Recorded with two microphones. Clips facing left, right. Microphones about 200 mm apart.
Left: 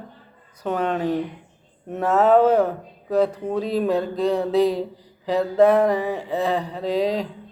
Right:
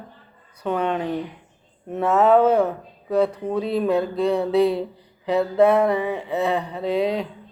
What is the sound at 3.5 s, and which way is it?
Speech, 40° left (ahead or behind).